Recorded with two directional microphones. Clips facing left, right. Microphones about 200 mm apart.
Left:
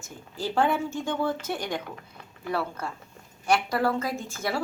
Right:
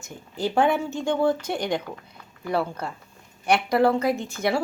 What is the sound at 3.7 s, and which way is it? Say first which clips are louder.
Speech: right 6 dB; 20° right (ahead or behind).